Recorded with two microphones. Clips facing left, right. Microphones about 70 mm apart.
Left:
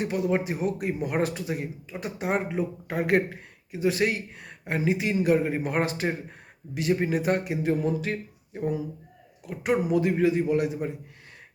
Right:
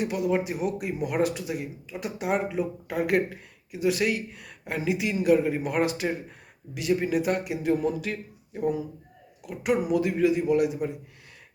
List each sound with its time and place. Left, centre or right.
0.0 s speech: left